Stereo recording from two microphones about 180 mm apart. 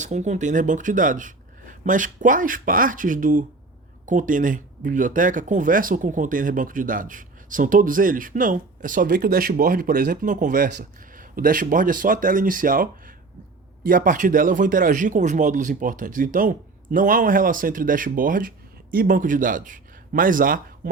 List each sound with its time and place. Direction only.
0.0 s a man's voice: 40° right (ahead or behind)